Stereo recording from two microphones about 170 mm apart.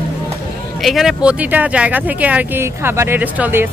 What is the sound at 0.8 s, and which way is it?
Speech, centre (ahead or behind).